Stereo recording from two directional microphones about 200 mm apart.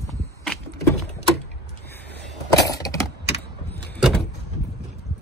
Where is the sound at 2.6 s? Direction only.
15° left (ahead or behind).